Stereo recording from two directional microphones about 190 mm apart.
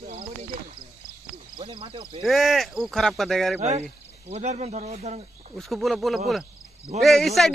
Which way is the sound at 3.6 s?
35° right (ahead or behind).